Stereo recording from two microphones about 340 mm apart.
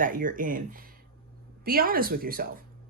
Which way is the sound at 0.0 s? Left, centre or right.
Right.